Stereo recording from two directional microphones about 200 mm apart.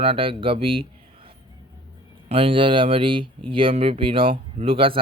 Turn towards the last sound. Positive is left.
turn(degrees=-25)  # may be behind; listen again after turning